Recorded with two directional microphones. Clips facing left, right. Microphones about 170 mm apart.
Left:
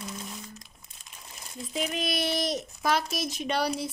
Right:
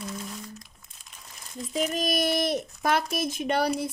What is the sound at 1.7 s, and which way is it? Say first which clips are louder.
A child's voice: right 4 dB; 40° right (ahead or behind).